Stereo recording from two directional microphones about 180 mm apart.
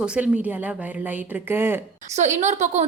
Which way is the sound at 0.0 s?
5° right (ahead or behind).